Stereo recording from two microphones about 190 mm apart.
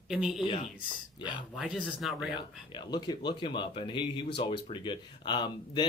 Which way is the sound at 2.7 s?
25° left (ahead or behind).